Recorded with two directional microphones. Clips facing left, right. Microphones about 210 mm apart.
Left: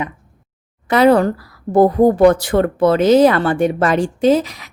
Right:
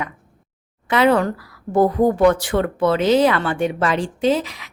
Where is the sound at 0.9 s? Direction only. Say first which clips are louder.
Left 4 dB; 40° left (ahead or behind).